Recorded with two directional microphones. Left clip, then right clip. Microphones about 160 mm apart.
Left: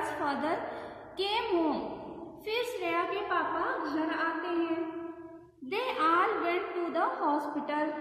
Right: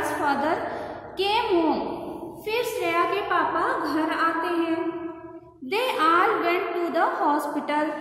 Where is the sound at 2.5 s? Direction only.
30° left (ahead or behind).